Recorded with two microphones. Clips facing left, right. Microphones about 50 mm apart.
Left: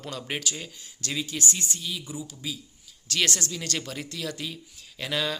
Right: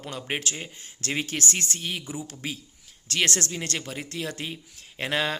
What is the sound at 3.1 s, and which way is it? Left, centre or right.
Speech, right.